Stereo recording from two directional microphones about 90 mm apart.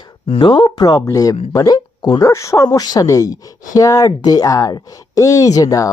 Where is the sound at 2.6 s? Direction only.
45° left (ahead or behind).